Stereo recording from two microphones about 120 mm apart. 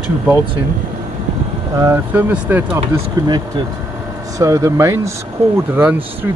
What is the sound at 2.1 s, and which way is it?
Speech, 15° right (ahead or behind).